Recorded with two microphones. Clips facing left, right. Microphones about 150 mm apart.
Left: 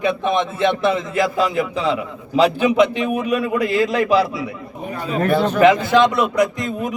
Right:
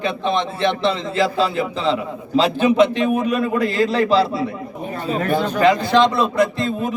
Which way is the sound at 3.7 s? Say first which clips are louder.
Left 2 dB; 35° right (ahead or behind).